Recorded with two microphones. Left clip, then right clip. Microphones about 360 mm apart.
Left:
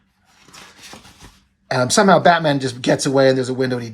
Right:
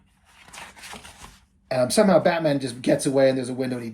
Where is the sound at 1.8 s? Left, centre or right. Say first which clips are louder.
Left 6 dB; left.